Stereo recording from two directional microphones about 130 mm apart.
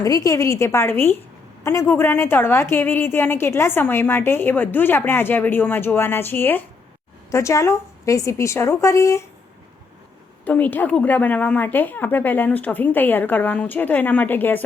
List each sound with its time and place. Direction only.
0.0 s a woman's voice: 25° left (ahead or behind)
10.4 s a woman's voice: 15° left (ahead or behind)